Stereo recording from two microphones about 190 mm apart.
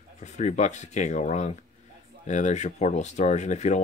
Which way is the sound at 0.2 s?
40° left (ahead or behind).